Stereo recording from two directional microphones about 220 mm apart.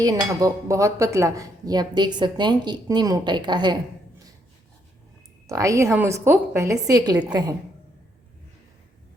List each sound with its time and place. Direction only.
0.0 s speech: 15° right (ahead or behind)
5.5 s speech: 15° right (ahead or behind)